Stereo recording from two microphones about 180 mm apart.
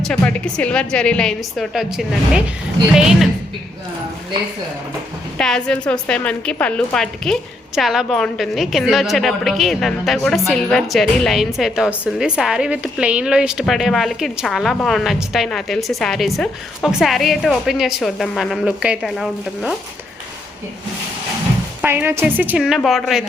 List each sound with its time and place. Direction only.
0.0 s a woman's voice: 5° left (ahead or behind)
5.4 s a woman's voice: 5° left (ahead or behind)
21.8 s a woman's voice: 10° right (ahead or behind)